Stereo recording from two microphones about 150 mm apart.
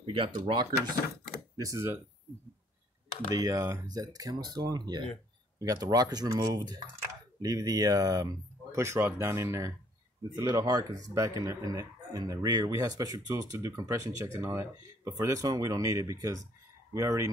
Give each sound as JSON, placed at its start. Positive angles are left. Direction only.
{"t": 0.0, "sound": "speech", "side_deg": -35}
{"t": 1.6, "sound": "speech", "side_deg": -20}
{"t": 3.3, "sound": "speech", "side_deg": -25}